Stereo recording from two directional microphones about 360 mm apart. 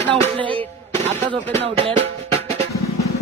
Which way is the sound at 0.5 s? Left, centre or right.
Centre.